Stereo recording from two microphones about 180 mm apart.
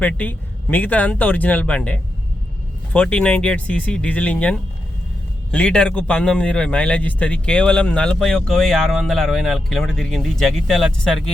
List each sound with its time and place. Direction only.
0.0 s a man's voice: 10° left (ahead or behind)